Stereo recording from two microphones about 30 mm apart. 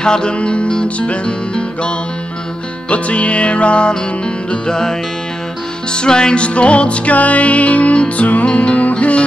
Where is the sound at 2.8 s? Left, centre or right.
Left.